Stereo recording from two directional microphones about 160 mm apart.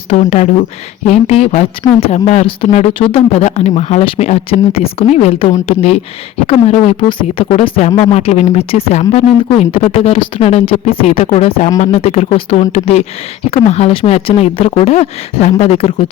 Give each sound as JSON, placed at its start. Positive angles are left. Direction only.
{"t": 0.1, "sound": "speech", "side_deg": 45}